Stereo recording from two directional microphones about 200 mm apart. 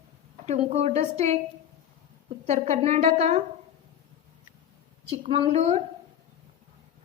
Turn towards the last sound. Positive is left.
turn(degrees=-30)  # may be behind; listen again after turning